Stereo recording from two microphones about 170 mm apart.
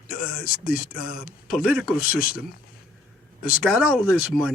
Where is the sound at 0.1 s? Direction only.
60° left (ahead or behind).